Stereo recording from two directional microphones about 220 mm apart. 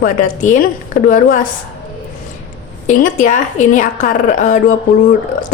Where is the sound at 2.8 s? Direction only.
35° left (ahead or behind).